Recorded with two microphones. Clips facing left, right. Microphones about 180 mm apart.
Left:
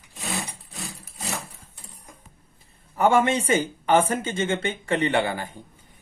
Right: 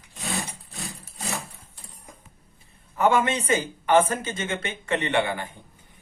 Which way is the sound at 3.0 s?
30° left (ahead or behind).